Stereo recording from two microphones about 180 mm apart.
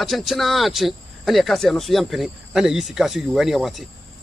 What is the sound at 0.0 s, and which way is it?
Speech, centre (ahead or behind).